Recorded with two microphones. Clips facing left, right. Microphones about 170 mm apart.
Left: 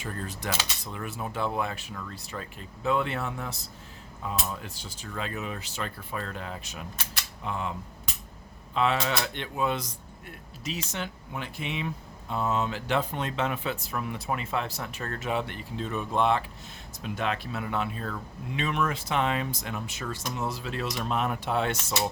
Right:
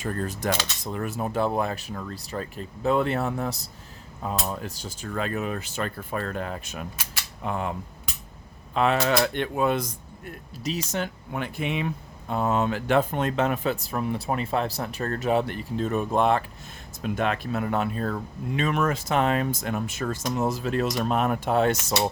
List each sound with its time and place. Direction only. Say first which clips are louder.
0.0 s cutlery: right 7 dB; 45° right (ahead or behind)
4.2 s speech: right 4 dB; 40° right (ahead or behind)
6.9 s speech: even; 5° right (ahead or behind)
7.4 s speech: right 4 dB; 50° right (ahead or behind)
8.7 s speech: right 5 dB; 50° right (ahead or behind)
10.6 s speech: right 6 dB; 40° right (ahead or behind)